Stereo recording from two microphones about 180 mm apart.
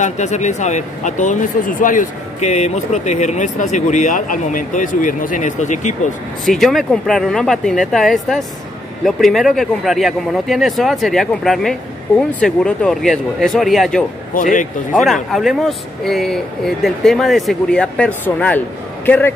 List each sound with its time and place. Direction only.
0.0 s speech: 40° left (ahead or behind)
6.4 s speech: centre (ahead or behind)
14.3 s speech: 45° left (ahead or behind)
15.0 s speech: centre (ahead or behind)